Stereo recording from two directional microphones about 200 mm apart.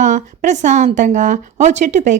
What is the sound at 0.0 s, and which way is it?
A woman's voice, 35° right (ahead or behind).